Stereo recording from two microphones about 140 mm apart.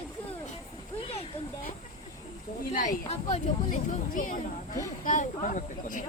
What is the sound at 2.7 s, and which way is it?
Speech, 65° left (ahead or behind).